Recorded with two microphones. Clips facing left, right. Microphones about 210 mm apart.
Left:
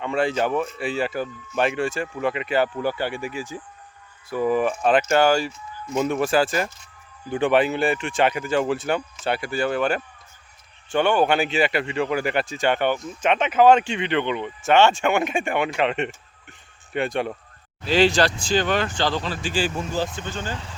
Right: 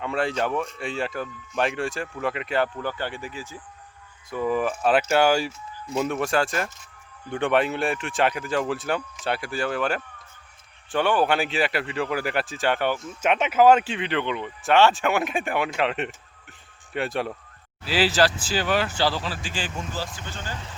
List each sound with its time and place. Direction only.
0.0 s speech: centre (ahead or behind)
6.0 s speech: centre (ahead or behind); by 20.5 s 15° left (ahead or behind)